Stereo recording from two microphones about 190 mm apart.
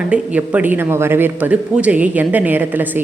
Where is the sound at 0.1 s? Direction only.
10° right (ahead or behind).